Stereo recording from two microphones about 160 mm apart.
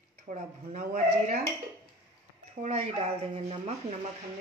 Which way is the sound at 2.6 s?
40° right (ahead or behind).